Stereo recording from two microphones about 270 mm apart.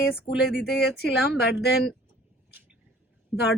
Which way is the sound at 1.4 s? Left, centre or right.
Left.